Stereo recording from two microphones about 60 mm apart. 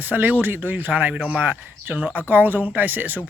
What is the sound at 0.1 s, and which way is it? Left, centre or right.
Speech, right.